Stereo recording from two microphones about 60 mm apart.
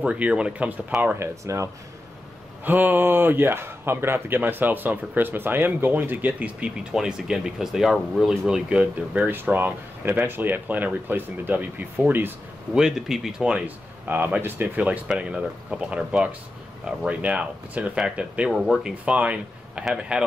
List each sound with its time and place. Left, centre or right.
0.0 s speech: centre
1.2 s speech: right
2.6 s speech: right
6.6 s speech: centre
9.2 s speech: right
12.7 s speech: centre
13.7 s speech: right
14.8 s speech: right
18.5 s speech: centre
19.0 s speech: right